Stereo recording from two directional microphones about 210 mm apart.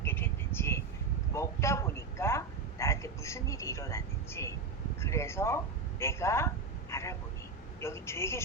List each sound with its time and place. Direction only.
0.0 s a sound: 10° left (ahead or behind)
4.9 s a woman's voice: 15° left (ahead or behind)
6.9 s vehicle: 15° left (ahead or behind)
7.8 s a woman's voice: 10° left (ahead or behind)